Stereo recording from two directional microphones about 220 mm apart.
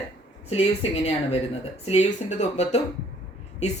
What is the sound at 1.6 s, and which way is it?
Speech, 30° left (ahead or behind).